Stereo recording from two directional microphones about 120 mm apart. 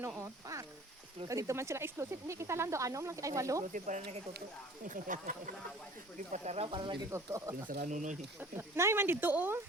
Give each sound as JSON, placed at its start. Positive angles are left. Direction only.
{"t": 0.2, "sound": "speech", "side_deg": -25}
{"t": 3.6, "sound": "speech", "side_deg": -90}
{"t": 6.3, "sound": "speech", "side_deg": -70}
{"t": 6.7, "sound": "speech", "side_deg": -45}
{"t": 7.1, "sound": "speech", "side_deg": -25}
{"t": 7.8, "sound": "speech", "side_deg": -90}
{"t": 8.4, "sound": "speech", "side_deg": -20}